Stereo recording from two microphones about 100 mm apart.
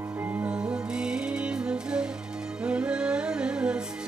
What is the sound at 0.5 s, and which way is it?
Music, 10° right (ahead or behind).